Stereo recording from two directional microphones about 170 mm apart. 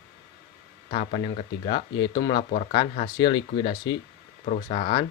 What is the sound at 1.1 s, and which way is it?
Speech, 30° left (ahead or behind).